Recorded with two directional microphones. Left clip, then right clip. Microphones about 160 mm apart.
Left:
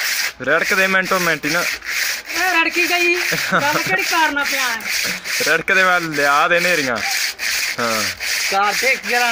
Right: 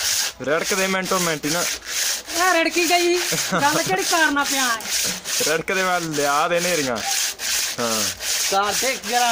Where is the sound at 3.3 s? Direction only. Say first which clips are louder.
Left 3 dB; 15° left (ahead or behind).